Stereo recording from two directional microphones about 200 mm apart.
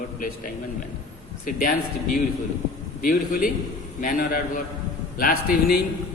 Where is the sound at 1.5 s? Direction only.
45° left (ahead or behind).